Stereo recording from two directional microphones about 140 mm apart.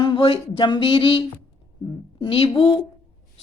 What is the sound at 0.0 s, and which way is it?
Speech, 40° left (ahead or behind).